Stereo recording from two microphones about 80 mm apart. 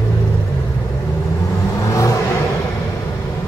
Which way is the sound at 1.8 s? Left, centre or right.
Left.